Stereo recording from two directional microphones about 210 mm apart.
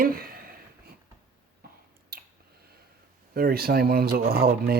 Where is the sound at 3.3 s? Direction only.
45° right (ahead or behind).